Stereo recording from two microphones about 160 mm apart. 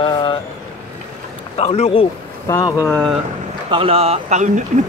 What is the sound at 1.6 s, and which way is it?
Speech, 40° left (ahead or behind).